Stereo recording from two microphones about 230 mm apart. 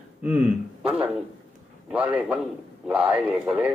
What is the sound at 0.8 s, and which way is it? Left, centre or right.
A man's voice, centre.